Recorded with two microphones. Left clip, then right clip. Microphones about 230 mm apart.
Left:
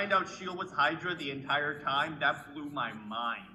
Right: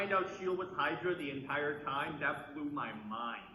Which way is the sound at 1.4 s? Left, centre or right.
Left.